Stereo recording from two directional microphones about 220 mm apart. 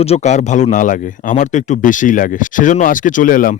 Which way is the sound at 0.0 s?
30° left (ahead or behind).